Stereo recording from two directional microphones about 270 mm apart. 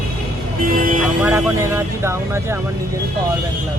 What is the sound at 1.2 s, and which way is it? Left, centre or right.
Speech, centre.